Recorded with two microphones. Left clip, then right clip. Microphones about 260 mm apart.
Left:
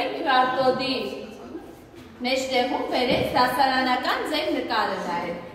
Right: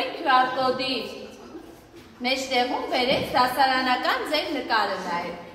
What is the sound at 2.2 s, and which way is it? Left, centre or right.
A woman's voice, right.